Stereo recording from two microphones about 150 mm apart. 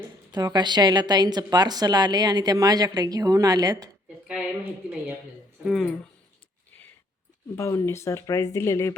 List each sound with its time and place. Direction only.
0.3 s a woman's voice: 25° right (ahead or behind)
5.6 s speech: centre (ahead or behind)
7.5 s speech: 20° left (ahead or behind)